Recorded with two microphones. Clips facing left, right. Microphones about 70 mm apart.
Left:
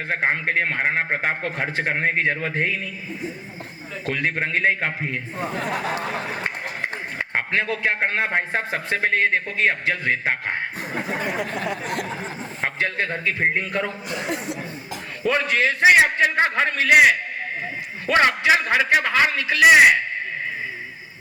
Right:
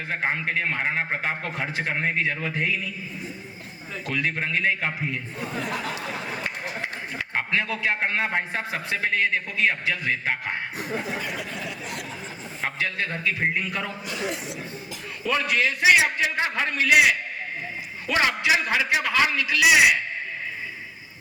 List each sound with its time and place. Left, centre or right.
0.1 s a man's voice: left
4.0 s a man's voice: left
6.4 s a man's voice: left
10.9 s a sound: left
15.2 s a man's voice: left